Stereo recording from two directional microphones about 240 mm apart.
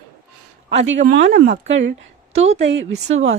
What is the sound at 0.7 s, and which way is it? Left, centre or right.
Speech, right.